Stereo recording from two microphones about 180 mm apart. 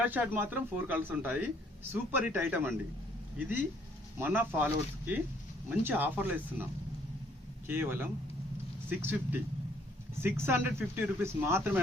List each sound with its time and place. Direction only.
0.0 s speech: 10° right (ahead or behind)
4.2 s speech: 10° right (ahead or behind)
7.7 s speech: 10° right (ahead or behind)